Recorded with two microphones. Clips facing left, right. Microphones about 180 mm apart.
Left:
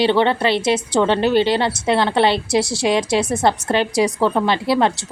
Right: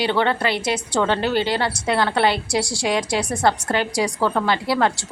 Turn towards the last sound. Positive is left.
turn(degrees=20)  # may be behind; listen again after turning